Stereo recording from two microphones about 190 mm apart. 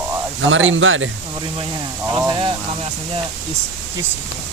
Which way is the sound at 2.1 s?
25° right (ahead or behind).